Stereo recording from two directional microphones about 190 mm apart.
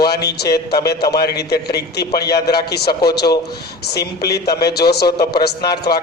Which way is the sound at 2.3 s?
55° left (ahead or behind).